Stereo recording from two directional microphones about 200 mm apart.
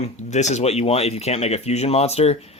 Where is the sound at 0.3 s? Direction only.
35° left (ahead or behind).